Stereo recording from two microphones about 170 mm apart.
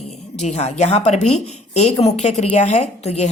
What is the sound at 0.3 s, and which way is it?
A woman's voice, 40° left (ahead or behind).